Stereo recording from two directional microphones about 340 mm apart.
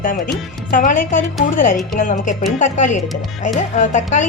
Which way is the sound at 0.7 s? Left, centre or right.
Left.